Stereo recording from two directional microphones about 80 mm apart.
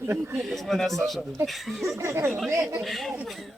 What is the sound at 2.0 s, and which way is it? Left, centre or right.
Speech, right.